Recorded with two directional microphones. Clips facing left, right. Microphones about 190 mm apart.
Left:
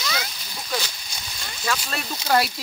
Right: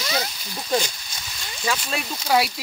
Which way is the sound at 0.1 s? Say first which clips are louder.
Right 4 dB; 30° right (ahead or behind).